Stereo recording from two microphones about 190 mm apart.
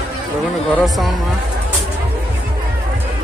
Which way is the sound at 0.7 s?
Centre (ahead or behind).